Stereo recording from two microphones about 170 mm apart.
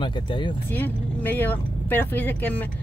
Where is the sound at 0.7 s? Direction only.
10° left (ahead or behind).